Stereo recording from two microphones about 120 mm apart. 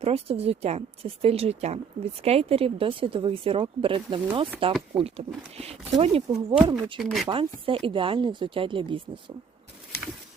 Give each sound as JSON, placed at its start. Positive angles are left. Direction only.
{"t": 0.0, "sound": "a woman's voice", "side_deg": -55}
{"t": 4.9, "sound": "a woman's voice", "side_deg": -55}
{"t": 6.7, "sound": "speech", "side_deg": -40}
{"t": 7.0, "sound": "speech", "side_deg": 0}
{"t": 7.3, "sound": "speech", "side_deg": -50}